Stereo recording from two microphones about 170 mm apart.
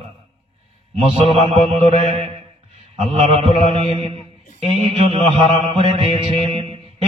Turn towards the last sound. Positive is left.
turn(degrees=-30)  # may be behind; listen again after turning